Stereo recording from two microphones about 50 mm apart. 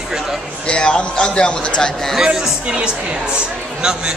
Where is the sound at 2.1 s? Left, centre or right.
Centre.